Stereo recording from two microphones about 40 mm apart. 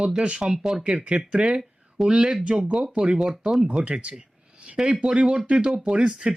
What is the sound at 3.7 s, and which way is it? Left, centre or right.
A man's voice, right.